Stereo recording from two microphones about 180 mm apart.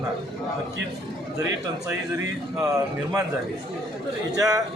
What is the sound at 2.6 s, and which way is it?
Speech, 20° right (ahead or behind).